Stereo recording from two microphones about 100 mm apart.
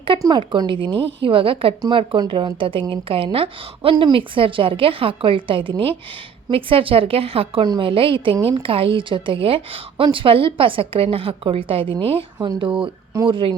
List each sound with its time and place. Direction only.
0.3 s a woman's voice: 50° right (ahead or behind)
2.6 s a woman's voice: 60° right (ahead or behind)
7.6 s speech: 45° right (ahead or behind)
7.9 s a woman's voice: 60° right (ahead or behind)
12.4 s a woman's voice: 50° right (ahead or behind)